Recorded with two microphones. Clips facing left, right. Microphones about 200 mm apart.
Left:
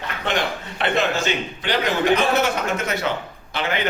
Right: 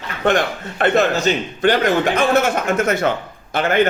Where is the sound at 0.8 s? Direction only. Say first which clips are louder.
Right 5 dB; 45° right (ahead or behind).